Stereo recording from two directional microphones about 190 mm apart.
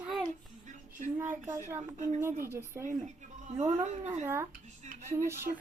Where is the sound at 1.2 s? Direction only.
15° right (ahead or behind).